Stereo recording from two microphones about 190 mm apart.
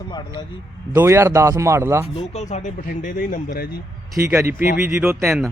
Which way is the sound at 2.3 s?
40° left (ahead or behind).